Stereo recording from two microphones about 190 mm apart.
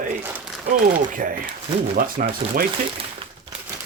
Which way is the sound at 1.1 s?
45° right (ahead or behind).